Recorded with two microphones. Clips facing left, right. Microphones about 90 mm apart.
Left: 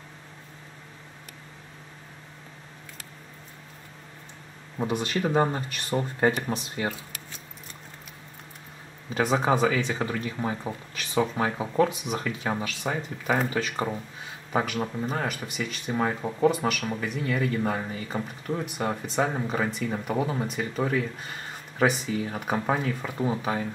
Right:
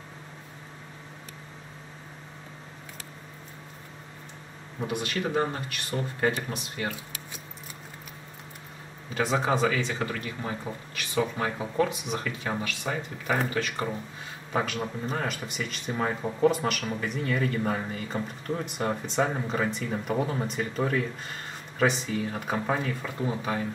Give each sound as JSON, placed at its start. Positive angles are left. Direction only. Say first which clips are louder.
{"t": 4.7, "sound": "speech", "louder": "left 3 dB", "side_deg": 35}
{"t": 9.5, "sound": "speech", "louder": "left 2 dB", "side_deg": 20}
{"t": 14.5, "sound": "speech", "louder": "left 2 dB", "side_deg": 10}